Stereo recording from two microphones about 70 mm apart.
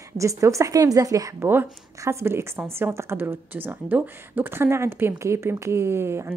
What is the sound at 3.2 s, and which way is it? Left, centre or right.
Speech, right.